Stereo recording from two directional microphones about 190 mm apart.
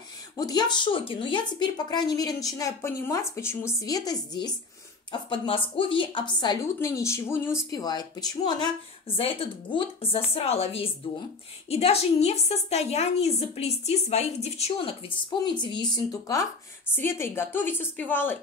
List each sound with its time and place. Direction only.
0.4 s a woman's voice: 20° left (ahead or behind)